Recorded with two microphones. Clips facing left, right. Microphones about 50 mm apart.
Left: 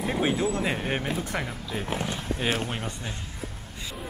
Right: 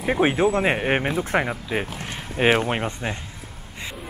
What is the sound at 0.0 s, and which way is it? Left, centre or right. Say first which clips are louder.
Speech: right 6 dB; right.